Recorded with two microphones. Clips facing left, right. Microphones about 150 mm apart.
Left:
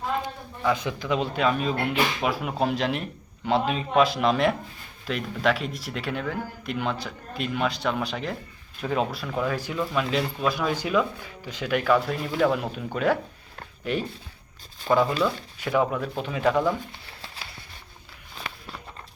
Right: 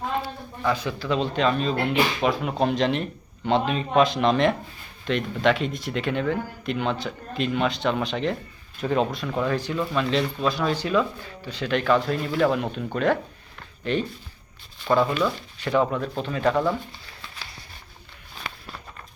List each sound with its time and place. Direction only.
0.2 s speech: 15° left (ahead or behind)
14.9 s speech: 35° left (ahead or behind)
15.6 s speech: 10° left (ahead or behind)